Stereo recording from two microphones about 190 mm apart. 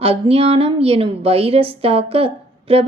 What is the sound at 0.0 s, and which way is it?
A woman's voice, 30° right (ahead or behind).